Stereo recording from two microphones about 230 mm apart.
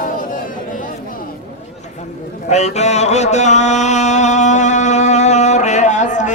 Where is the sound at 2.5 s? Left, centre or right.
Left.